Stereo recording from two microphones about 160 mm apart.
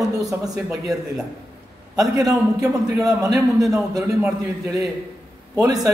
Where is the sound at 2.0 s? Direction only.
20° right (ahead or behind).